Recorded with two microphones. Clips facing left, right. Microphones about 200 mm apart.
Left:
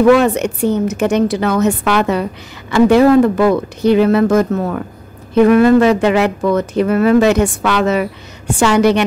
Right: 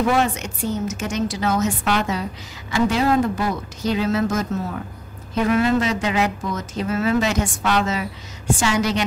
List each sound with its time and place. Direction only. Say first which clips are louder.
0.0 s a woman's voice: left 10 dB; 65° left (ahead or behind)